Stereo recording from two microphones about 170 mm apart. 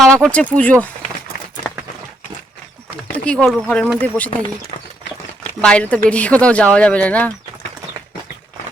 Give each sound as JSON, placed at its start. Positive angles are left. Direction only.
{"t": 0.0, "sound": "speech", "side_deg": 5}
{"t": 3.1, "sound": "speech", "side_deg": 5}
{"t": 5.6, "sound": "speech", "side_deg": 10}